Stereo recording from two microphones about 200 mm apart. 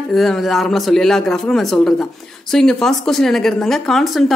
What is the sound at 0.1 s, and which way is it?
Speech, centre (ahead or behind).